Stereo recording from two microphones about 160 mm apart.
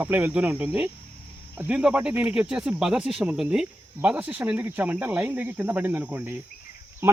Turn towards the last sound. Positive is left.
turn(degrees=-15)  # may be behind; listen again after turning